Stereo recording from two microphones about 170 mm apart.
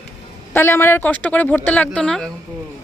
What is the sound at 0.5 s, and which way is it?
A man's voice, 15° left (ahead or behind).